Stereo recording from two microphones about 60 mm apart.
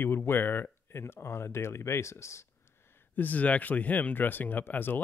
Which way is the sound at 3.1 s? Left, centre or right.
Left.